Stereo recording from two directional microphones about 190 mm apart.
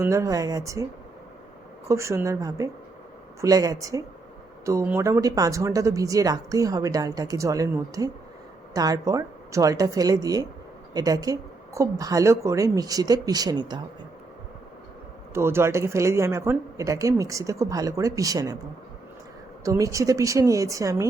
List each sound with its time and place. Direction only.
0.0 s speech: 15° right (ahead or behind)
1.9 s a woman's voice: 15° right (ahead or behind)
15.3 s speech: 15° right (ahead or behind)
19.6 s speech: 15° right (ahead or behind)